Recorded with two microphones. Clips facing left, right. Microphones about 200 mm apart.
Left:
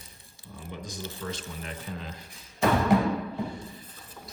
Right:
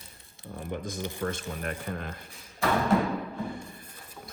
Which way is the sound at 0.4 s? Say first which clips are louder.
Right 5 dB; 50° right (ahead or behind).